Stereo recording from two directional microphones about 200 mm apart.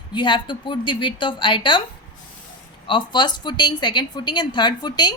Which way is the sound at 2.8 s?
25° left (ahead or behind).